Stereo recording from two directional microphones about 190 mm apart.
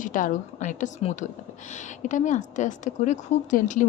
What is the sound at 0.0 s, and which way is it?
A woman's voice, 45° left (ahead or behind).